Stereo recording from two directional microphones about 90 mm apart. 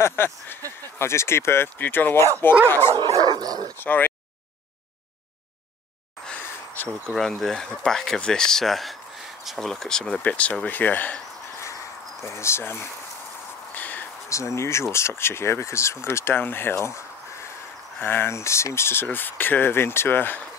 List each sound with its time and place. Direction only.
0.0 s speech: 25° left (ahead or behind)
2.9 s dog: 60° right (ahead or behind)
3.7 s speech: 20° left (ahead or behind)
6.2 s a sound: 15° left (ahead or behind)
7.1 s speech: 5° left (ahead or behind)
12.2 s speech: 30° left (ahead or behind)
13.7 s a sound: 20° left (ahead or behind)
14.3 s speech: 35° left (ahead or behind)